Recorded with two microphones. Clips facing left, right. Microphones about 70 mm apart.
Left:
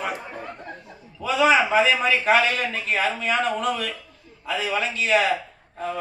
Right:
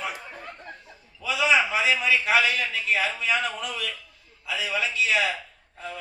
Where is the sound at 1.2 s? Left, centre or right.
Left.